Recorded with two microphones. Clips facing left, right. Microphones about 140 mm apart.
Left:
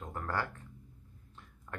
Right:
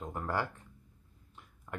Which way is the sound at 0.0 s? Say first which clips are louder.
Right 2 dB; 15° right (ahead or behind).